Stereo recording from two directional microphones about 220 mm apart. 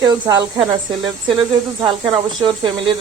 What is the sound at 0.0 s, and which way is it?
Speech, 20° right (ahead or behind).